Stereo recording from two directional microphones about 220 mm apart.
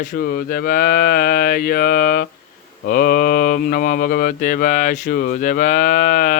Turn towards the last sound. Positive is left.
turn(degrees=40)  # may be behind; listen again after turning